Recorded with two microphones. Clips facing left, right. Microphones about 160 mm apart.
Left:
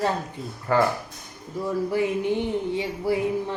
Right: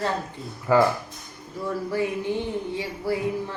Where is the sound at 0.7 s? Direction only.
5° right (ahead or behind).